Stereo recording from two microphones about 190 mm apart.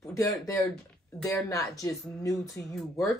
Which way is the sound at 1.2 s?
15° left (ahead or behind).